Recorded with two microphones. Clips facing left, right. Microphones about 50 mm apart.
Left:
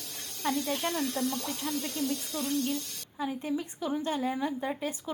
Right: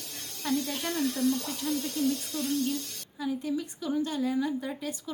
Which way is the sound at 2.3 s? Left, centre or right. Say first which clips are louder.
Right 1 dB; left.